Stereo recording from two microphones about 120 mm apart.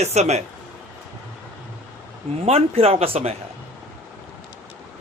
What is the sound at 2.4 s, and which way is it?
Speech, 60° right (ahead or behind).